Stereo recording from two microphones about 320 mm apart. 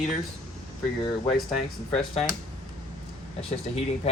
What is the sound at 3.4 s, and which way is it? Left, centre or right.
Speech, centre.